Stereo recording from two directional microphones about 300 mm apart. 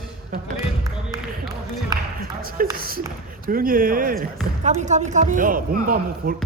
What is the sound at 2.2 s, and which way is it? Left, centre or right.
Basketball bounce, right.